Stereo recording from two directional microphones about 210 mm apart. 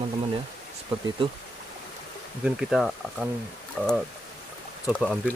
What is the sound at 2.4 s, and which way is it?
Speech, centre (ahead or behind).